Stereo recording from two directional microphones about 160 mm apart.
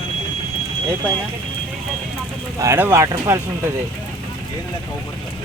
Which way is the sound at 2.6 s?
15° right (ahead or behind).